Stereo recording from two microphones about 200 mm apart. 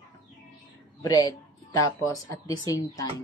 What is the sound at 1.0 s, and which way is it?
Speech, 20° left (ahead or behind).